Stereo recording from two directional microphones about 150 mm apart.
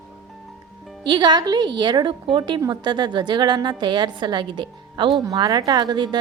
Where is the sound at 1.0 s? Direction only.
30° right (ahead or behind).